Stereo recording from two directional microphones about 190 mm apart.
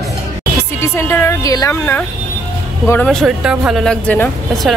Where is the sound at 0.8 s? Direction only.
15° left (ahead or behind).